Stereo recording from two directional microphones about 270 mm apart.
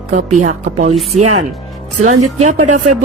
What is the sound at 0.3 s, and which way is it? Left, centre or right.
Speech, right.